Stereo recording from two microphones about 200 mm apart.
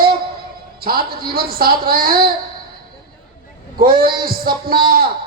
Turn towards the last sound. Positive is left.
turn(degrees=-45)  # may be behind; listen again after turning